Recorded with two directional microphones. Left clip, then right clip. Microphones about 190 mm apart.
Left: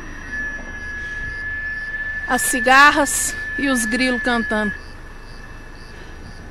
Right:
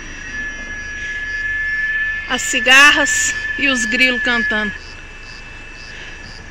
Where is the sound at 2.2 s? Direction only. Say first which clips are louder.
Left 1 dB; 20° left (ahead or behind).